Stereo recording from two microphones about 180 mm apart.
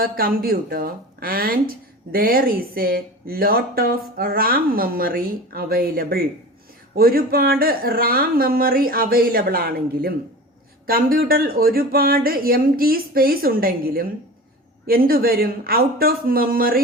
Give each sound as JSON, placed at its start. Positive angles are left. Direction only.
{"t": 0.0, "sound": "speech", "side_deg": -55}